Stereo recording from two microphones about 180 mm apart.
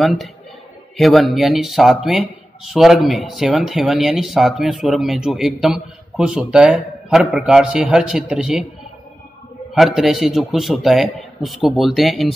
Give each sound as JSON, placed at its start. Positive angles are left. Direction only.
{"t": 0.0, "sound": "speech", "side_deg": 0}
{"t": 9.8, "sound": "speech", "side_deg": 0}